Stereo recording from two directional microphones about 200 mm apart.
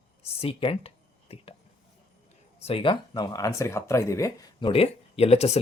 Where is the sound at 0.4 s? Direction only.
30° left (ahead or behind).